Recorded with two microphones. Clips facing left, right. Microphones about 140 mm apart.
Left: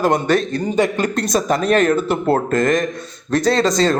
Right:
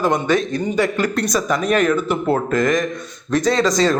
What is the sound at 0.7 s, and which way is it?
A man's voice, 20° left (ahead or behind).